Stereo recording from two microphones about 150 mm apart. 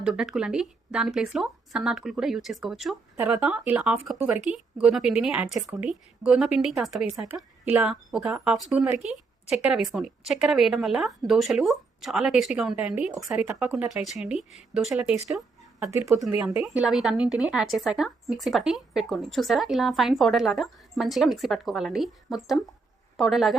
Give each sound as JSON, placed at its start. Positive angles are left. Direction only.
{"t": 0.0, "sound": "a woman's voice", "side_deg": -5}
{"t": 15.4, "sound": "speech", "side_deg": -20}
{"t": 16.6, "sound": "a woman's voice", "side_deg": -5}